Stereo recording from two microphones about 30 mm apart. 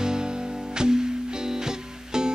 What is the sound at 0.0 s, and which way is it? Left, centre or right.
Music, right.